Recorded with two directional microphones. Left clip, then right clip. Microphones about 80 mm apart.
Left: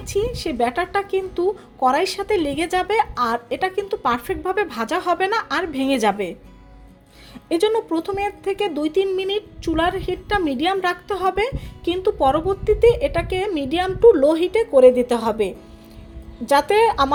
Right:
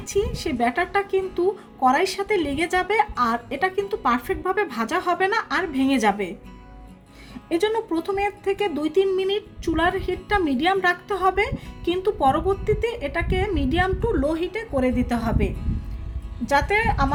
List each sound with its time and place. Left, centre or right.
0.0 s speech: left
7.5 s speech: left
8.1 s a woman's voice: left